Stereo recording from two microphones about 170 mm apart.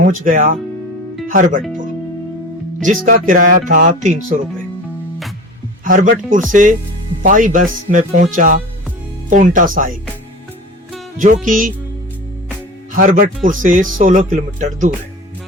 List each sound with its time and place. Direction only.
0.0 s speech: 55° right (ahead or behind)
2.8 s speech: 55° right (ahead or behind)
5.8 s speech: 55° right (ahead or behind)
11.4 s speech: 55° right (ahead or behind)
13.0 s speech: 55° right (ahead or behind)